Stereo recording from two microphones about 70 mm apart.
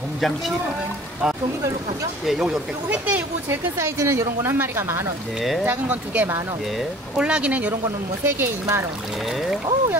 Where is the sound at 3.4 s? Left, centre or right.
Right.